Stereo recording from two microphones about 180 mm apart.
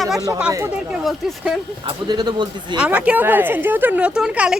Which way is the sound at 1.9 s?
25° right (ahead or behind).